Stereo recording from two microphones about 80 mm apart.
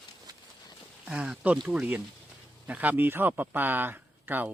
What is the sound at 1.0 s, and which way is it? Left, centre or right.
Speech, centre.